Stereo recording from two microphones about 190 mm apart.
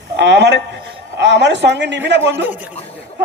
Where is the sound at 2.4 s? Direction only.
10° right (ahead or behind).